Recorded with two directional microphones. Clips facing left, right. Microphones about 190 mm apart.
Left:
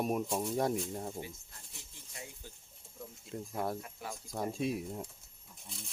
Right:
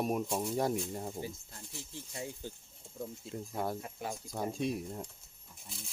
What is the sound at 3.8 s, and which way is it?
Speech, 25° right (ahead or behind).